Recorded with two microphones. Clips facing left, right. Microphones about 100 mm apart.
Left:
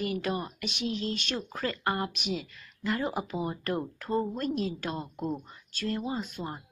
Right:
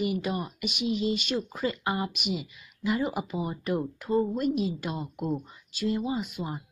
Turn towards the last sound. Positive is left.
turn(degrees=-10)  # may be behind; listen again after turning